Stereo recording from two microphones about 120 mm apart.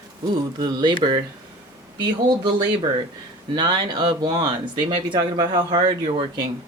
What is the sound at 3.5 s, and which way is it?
Speech, 35° right (ahead or behind).